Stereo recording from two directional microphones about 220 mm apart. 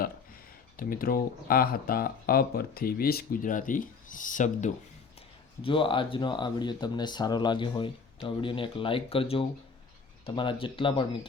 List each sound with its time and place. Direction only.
0.8 s speech: 40° left (ahead or behind)
5.6 s speech: 25° left (ahead or behind)